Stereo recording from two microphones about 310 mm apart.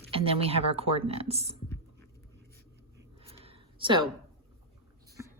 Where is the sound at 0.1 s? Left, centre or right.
Centre.